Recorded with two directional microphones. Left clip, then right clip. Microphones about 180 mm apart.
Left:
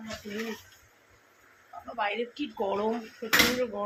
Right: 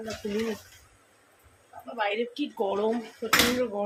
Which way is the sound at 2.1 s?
15° right (ahead or behind).